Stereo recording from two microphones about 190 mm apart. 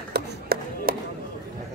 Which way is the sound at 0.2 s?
60° right (ahead or behind).